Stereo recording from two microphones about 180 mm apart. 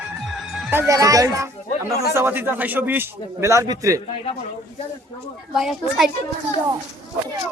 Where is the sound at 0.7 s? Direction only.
15° right (ahead or behind).